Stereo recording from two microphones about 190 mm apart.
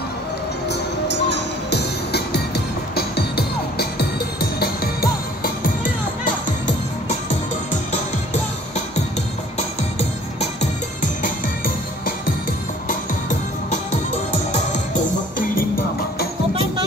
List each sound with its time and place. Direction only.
0.7 s music: 65° left (ahead or behind)
10.4 s music: 40° left (ahead or behind)
15.3 s music: 45° left (ahead or behind)